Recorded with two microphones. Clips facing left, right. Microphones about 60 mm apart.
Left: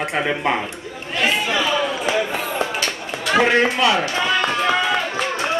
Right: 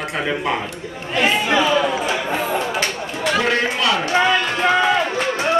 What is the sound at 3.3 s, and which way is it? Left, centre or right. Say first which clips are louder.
Speech: left 5 dB; left.